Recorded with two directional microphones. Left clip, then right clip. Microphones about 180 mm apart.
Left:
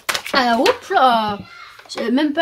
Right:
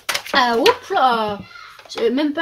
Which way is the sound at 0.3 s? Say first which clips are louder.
Right 1 dB; 40° left (ahead or behind).